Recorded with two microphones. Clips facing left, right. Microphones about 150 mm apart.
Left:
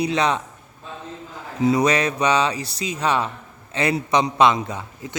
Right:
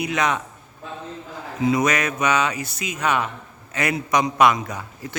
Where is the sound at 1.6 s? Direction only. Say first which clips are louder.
Left 2 dB; 35° left (ahead or behind).